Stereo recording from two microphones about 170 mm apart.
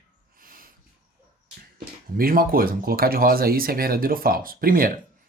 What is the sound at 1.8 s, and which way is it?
Speech, 60° right (ahead or behind).